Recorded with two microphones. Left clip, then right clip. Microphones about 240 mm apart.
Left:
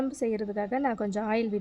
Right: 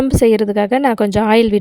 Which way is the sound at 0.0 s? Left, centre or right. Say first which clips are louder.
Right 17 dB; right.